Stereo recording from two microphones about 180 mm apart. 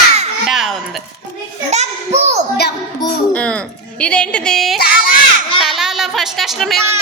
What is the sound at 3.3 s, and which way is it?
A child's voice, 5° left (ahead or behind).